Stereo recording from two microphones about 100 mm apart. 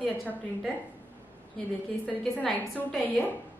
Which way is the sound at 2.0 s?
15° left (ahead or behind).